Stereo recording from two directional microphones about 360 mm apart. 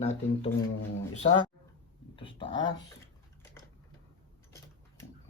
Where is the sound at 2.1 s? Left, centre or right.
Centre.